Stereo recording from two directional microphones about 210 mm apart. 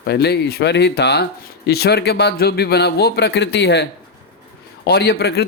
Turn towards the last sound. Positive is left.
turn(degrees=50)  # may be behind; listen again after turning